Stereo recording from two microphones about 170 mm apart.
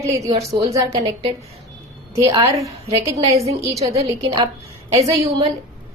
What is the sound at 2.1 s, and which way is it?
A woman's voice, 20° right (ahead or behind).